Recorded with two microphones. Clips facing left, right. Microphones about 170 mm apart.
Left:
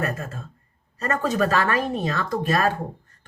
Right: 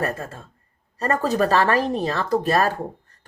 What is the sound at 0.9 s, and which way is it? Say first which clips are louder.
Speech: right 2 dB; 35° right (ahead or behind).